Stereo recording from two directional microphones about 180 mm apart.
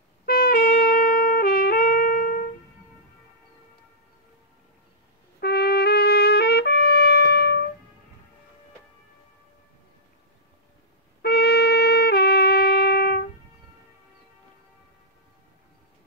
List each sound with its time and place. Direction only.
0.2 s trumpet: 55° left (ahead or behind)
5.4 s trumpet: 65° left (ahead or behind)
11.2 s music: 65° left (ahead or behind)